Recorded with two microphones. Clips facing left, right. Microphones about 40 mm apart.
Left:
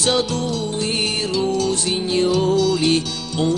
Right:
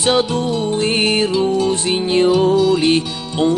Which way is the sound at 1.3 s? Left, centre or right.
Right.